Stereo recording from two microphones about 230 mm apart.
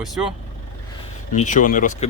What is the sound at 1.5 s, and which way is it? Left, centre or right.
Speech, left.